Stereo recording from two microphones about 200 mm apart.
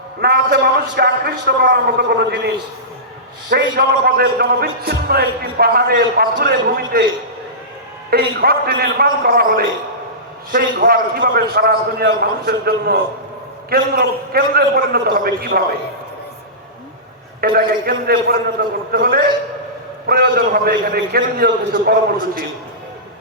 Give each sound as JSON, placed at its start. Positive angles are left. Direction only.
{"t": 0.2, "sound": "a man's voice", "side_deg": -55}
{"t": 3.5, "sound": "a man's voice", "side_deg": -50}
{"t": 8.1, "sound": "a man's voice", "side_deg": -50}
{"t": 17.4, "sound": "a man's voice", "side_deg": -45}